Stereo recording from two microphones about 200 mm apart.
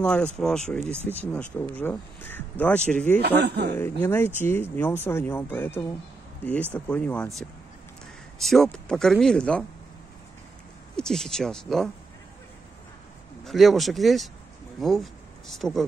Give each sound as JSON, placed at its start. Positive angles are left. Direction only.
{"t": 0.0, "sound": "speech", "side_deg": 5}
{"t": 3.2, "sound": "speech", "side_deg": -55}
{"t": 3.7, "sound": "speech", "side_deg": 10}
{"t": 8.4, "sound": "speech", "side_deg": 0}
{"t": 11.0, "sound": "speech", "side_deg": 5}
{"t": 13.4, "sound": "speech", "side_deg": 0}